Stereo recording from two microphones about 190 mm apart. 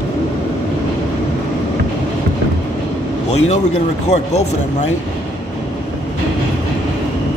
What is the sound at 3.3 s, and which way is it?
Speech, 35° left (ahead or behind).